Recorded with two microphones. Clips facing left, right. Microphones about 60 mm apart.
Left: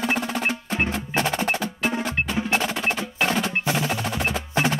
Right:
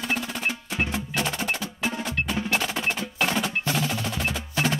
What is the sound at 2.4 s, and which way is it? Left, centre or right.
Percussion, left.